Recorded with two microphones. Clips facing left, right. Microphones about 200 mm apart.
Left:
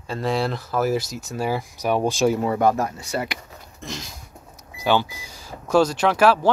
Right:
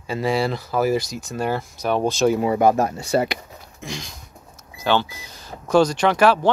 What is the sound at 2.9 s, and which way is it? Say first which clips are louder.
Speech: right 7 dB; 30° right (ahead or behind).